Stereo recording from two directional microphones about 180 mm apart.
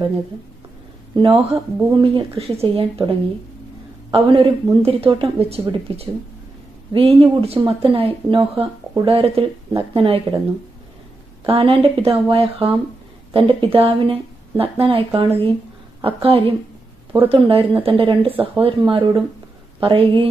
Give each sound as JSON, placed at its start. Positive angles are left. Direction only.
{"t": 1.1, "sound": "speech", "side_deg": -30}
{"t": 11.4, "sound": "speech", "side_deg": -30}